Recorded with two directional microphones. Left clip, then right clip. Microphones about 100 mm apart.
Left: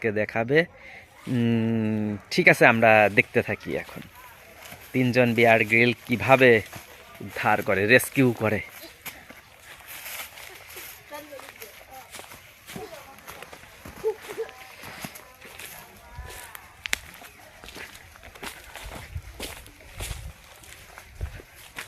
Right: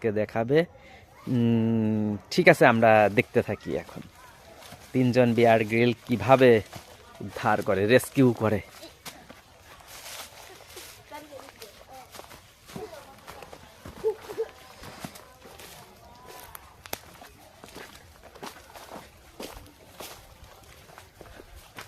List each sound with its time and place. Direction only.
0.0 s speech: 5° right (ahead or behind)
4.9 s speech: 15° right (ahead or behind)
7.6 s speech: 5° right (ahead or behind)
7.9 s speech: 20° right (ahead or behind)
12.7 s run: 10° left (ahead or behind)
18.4 s walk: 10° left (ahead or behind)
21.8 s a sound: 15° left (ahead or behind)